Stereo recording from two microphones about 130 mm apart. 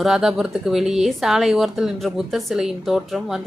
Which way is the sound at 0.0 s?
5° right (ahead or behind).